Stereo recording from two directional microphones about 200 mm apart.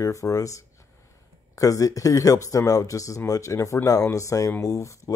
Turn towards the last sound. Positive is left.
turn(degrees=15)  # may be behind; listen again after turning